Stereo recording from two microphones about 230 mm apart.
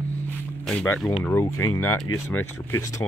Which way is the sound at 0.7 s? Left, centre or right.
Centre.